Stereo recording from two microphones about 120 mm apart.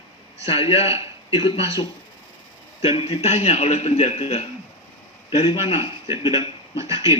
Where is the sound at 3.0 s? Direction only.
60° left (ahead or behind).